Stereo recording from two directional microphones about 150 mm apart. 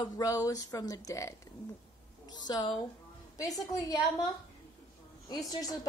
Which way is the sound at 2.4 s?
30° left (ahead or behind).